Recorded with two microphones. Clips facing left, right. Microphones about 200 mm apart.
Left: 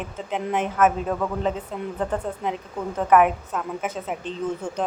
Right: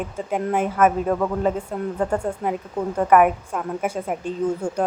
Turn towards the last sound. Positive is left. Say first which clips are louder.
# right 4 dB
turn(degrees=-10)  # may be behind; listen again after turning